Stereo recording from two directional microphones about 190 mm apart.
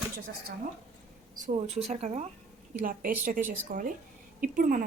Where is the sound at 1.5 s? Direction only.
35° right (ahead or behind).